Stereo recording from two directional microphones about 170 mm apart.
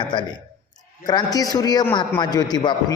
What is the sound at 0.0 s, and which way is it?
A man's voice, 25° left (ahead or behind).